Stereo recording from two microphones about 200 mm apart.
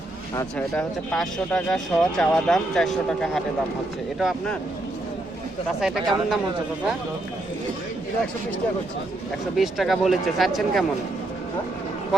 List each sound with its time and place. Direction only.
0.3 s speech: 5° left (ahead or behind)
5.8 s speech: centre (ahead or behind)
9.6 s speech: centre (ahead or behind)